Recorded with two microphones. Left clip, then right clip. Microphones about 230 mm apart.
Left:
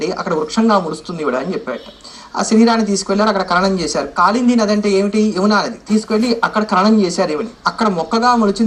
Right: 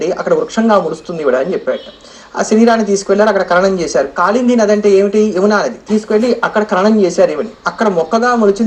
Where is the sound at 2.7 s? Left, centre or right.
Centre.